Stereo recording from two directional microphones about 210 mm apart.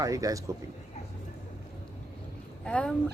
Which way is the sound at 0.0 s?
15° right (ahead or behind).